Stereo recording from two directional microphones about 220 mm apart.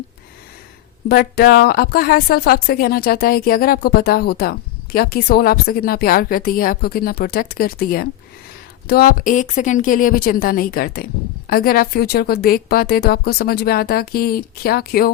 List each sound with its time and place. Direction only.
1.0 s a woman's voice: 45° left (ahead or behind)